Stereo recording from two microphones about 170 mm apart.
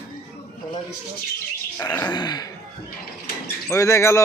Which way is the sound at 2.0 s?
25° left (ahead or behind).